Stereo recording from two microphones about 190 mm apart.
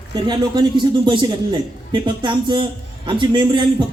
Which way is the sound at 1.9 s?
25° right (ahead or behind).